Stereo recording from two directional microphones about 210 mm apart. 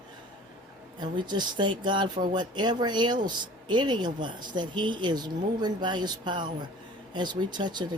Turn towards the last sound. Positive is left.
turn(degrees=-20)  # may be behind; listen again after turning